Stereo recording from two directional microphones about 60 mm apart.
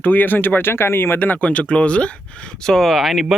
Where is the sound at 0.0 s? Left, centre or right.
Left.